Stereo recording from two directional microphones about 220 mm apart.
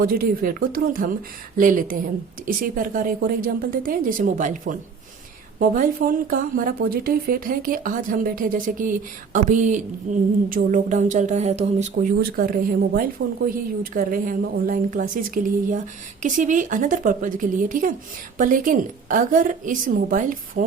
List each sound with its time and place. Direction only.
0.0 s a woman's voice: 40° right (ahead or behind)